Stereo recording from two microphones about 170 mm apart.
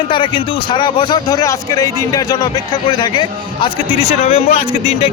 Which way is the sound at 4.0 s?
35° left (ahead or behind).